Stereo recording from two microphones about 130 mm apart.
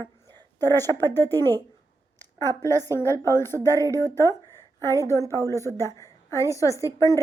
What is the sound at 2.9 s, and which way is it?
Speech, 20° left (ahead or behind).